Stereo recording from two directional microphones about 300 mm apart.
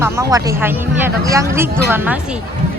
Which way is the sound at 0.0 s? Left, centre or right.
Centre.